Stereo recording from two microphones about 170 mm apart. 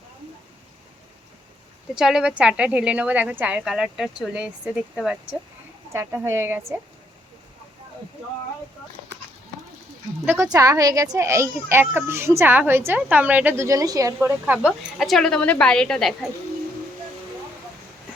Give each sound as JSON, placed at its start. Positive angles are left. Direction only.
{"t": 2.0, "sound": "a child's voice", "side_deg": -5}
{"t": 10.2, "sound": "a child's voice", "side_deg": -15}
{"t": 14.7, "sound": "speech", "side_deg": 0}